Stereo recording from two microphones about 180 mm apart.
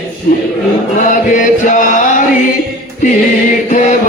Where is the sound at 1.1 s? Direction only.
45° left (ahead or behind).